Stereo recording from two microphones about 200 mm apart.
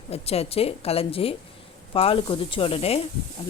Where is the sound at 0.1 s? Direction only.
30° left (ahead or behind).